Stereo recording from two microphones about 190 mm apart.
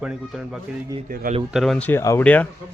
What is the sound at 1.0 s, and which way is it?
Speech, 50° right (ahead or behind).